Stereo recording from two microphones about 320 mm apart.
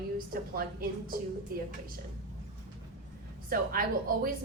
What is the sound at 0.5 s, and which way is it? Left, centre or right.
Speech, right.